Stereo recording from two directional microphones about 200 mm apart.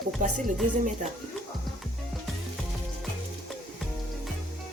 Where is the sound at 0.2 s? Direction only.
40° right (ahead or behind).